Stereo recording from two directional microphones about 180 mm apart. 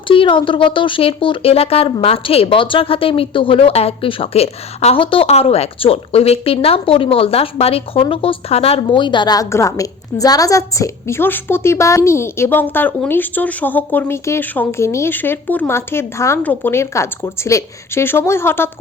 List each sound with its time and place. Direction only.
0.1 s speech: 30° left (ahead or behind); by 18.7 s 15° left (ahead or behind)